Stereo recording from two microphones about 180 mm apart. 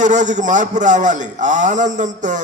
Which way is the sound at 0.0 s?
40° right (ahead or behind).